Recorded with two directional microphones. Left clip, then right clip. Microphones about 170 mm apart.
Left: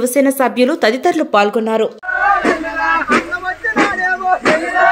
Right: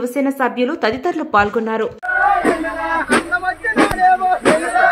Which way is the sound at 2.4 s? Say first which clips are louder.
Left 2 dB; 50° left (ahead or behind).